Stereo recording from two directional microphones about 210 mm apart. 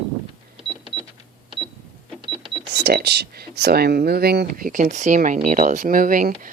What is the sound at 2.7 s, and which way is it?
Speech, 50° right (ahead or behind).